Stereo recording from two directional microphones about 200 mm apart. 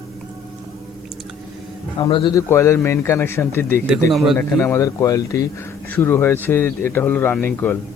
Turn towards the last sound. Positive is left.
turn(degrees=10)  # may be behind; listen again after turning